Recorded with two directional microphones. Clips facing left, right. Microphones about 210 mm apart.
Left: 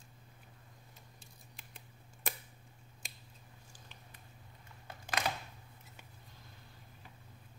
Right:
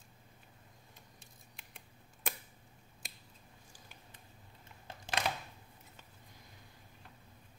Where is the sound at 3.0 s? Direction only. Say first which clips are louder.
Right 1 dB; centre (ahead or behind).